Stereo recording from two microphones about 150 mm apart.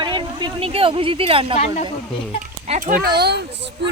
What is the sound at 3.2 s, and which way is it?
Speech, 90° right.